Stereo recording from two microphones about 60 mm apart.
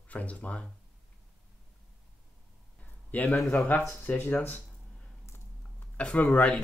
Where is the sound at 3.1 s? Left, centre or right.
Left.